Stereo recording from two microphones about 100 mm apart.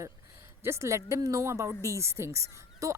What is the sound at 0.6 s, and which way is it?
Speech, 30° right (ahead or behind).